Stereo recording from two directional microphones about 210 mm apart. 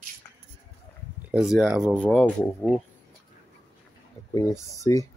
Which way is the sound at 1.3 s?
Centre (ahead or behind).